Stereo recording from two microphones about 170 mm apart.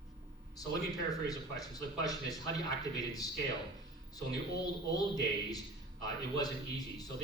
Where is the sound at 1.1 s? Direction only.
20° left (ahead or behind).